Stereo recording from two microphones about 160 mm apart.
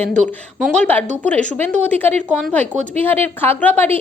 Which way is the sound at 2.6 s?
45° right (ahead or behind).